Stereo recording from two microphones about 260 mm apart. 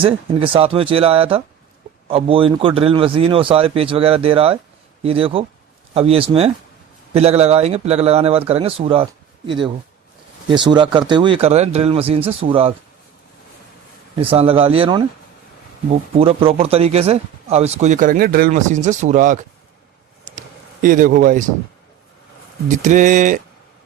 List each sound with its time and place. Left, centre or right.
0.0 s speech: centre
14.2 s speech: right
16.1 s speech: right
20.8 s speech: right
22.8 s speech: right